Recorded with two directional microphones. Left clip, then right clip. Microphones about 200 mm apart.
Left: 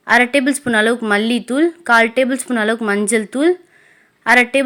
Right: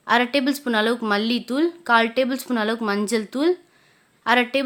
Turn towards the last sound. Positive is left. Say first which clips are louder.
# left 7 dB
turn(degrees=15)  # may be behind; listen again after turning